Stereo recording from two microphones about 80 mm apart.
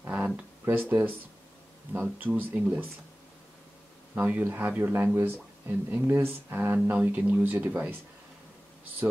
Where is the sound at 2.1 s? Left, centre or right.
Right.